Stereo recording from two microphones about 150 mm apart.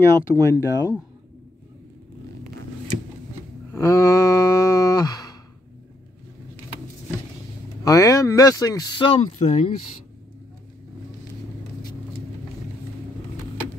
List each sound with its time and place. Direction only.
0.0 s speech: 20° left (ahead or behind)
3.7 s a sound: 20° left (ahead or behind)
7.8 s speech: 20° left (ahead or behind)
9.2 s speech: 50° left (ahead or behind)